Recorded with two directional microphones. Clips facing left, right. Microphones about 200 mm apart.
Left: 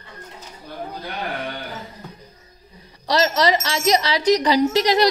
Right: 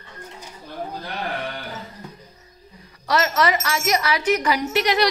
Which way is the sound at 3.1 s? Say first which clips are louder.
Left 2 dB; 35° left (ahead or behind).